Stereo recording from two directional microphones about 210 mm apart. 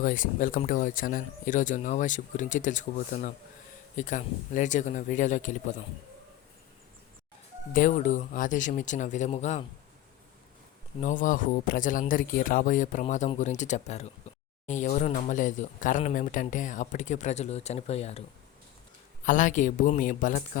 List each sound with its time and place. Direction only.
0.0 s speech: 40° left (ahead or behind)
7.7 s speech: 40° left (ahead or behind)
11.0 s speech: 35° left (ahead or behind)
19.2 s speech: 35° left (ahead or behind)